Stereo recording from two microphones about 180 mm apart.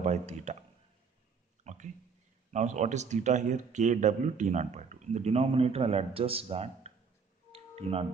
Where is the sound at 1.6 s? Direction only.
40° right (ahead or behind).